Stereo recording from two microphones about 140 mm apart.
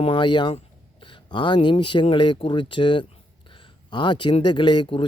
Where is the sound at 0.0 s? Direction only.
35° left (ahead or behind).